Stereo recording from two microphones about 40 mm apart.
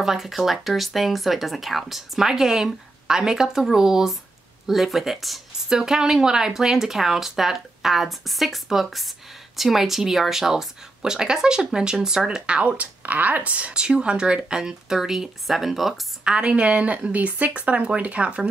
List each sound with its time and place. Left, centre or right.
0.0 s speech: centre; by 12.7 s right
12.7 s speech: right; by 16.0 s centre
16.3 s speech: right